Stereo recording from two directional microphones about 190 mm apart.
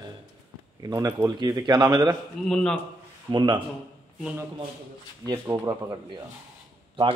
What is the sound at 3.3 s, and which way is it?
Speech, 25° right (ahead or behind).